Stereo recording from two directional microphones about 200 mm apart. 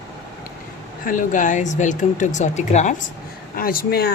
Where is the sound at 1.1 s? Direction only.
40° left (ahead or behind).